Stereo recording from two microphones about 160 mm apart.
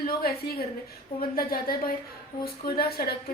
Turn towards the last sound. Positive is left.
turn(degrees=75)  # may be behind; listen again after turning